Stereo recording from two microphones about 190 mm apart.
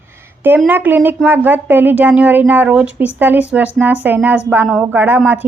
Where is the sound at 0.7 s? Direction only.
10° right (ahead or behind).